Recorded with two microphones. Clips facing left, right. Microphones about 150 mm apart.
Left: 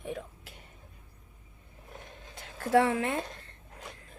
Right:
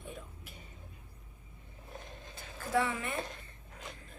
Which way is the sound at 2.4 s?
75° left (ahead or behind).